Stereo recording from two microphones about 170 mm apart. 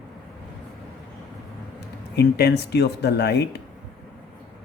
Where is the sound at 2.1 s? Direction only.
75° left (ahead or behind).